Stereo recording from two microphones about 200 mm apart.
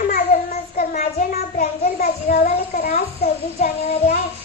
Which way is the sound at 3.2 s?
35° left (ahead or behind).